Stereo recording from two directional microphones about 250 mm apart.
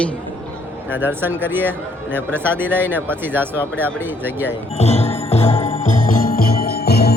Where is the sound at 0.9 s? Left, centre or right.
Centre.